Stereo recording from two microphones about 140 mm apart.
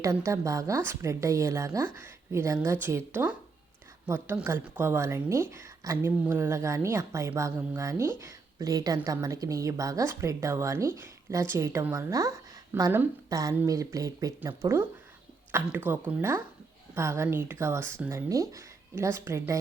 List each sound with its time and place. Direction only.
0.0 s a woman's voice: 20° right (ahead or behind)